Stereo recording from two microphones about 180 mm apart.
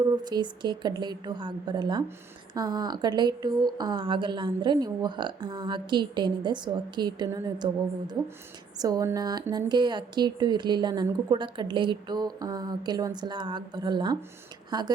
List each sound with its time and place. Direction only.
0.2 s speech: 25° right (ahead or behind)